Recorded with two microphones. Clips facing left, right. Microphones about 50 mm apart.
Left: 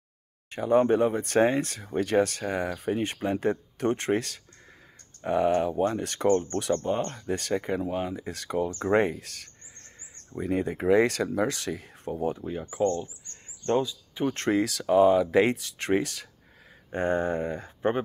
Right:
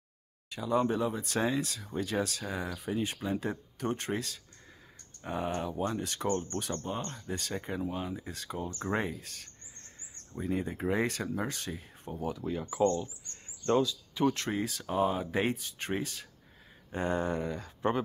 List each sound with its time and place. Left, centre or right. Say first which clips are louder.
0.5 s speech: left 8 dB; left
12.4 s speech: right 2 dB; left
14.5 s speech: left 10 dB; left
16.9 s speech: left 5 dB; left